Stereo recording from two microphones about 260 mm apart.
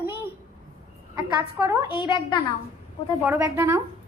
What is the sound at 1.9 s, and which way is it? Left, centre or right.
Speech, centre.